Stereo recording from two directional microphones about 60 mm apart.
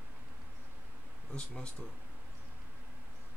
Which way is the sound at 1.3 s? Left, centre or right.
Centre.